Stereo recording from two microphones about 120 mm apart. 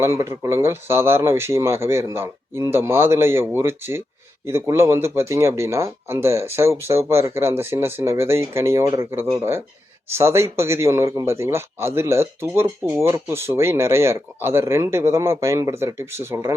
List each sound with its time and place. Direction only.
0.0 s speech: 25° right (ahead or behind)